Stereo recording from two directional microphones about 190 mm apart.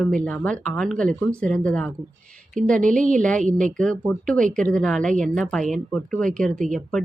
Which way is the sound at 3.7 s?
5° left (ahead or behind).